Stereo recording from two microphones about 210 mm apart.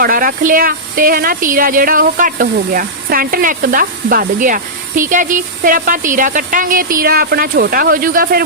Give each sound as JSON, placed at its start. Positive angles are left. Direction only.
{"t": 0.0, "sound": "speech", "side_deg": -45}